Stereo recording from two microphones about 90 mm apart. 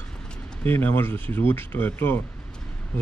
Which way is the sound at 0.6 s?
20° left (ahead or behind).